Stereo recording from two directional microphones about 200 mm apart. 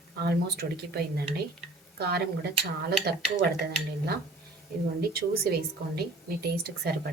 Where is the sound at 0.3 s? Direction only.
55° right (ahead or behind).